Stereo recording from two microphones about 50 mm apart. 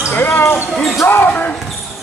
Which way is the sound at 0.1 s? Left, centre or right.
Left.